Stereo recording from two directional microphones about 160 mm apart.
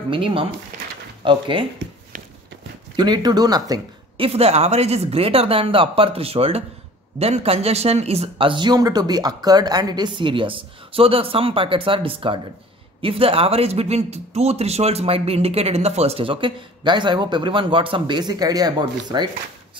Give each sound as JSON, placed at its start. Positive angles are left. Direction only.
{"t": 0.1, "sound": "speech", "side_deg": -35}
{"t": 3.0, "sound": "speech", "side_deg": -25}
{"t": 4.3, "sound": "speech", "side_deg": -40}